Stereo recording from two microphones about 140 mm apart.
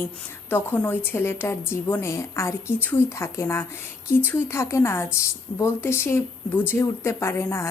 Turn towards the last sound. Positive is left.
turn(degrees=20)  # may be behind; listen again after turning